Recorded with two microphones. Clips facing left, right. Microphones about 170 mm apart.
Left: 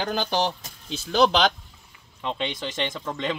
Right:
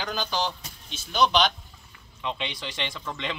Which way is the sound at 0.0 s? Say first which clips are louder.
Left 4 dB; 55° left (ahead or behind).